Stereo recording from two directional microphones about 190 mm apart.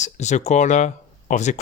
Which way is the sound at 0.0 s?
40° left (ahead or behind).